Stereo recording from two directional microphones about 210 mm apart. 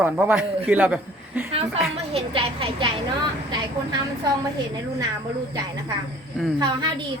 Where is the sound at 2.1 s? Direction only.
25° right (ahead or behind).